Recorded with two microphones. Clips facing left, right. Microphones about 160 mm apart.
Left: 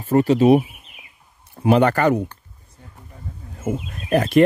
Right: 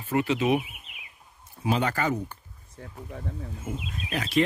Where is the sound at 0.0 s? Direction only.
40° left (ahead or behind).